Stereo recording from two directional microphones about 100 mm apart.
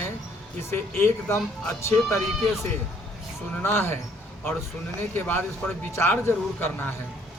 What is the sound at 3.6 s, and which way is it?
Speech, 25° left (ahead or behind).